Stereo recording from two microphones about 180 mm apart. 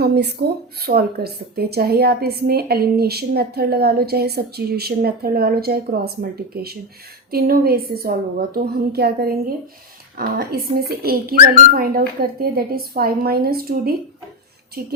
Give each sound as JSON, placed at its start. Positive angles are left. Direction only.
{"t": 0.0, "sound": "speech", "side_deg": -65}